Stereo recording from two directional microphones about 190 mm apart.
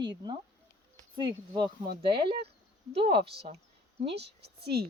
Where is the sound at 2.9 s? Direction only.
30° right (ahead or behind).